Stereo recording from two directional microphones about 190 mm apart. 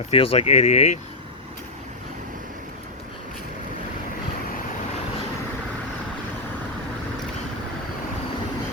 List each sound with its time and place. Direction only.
0.1 s speech: 30° left (ahead or behind)